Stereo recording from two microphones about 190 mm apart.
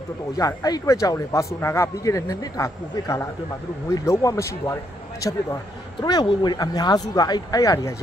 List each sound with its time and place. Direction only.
0.4 s speech: 15° left (ahead or behind)
5.9 s speech: 25° left (ahead or behind)